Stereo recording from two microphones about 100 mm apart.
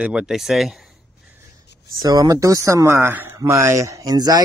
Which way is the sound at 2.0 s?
40° right (ahead or behind).